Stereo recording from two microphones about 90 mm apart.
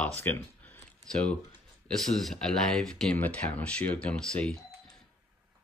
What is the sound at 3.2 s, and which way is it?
Speech, 15° left (ahead or behind).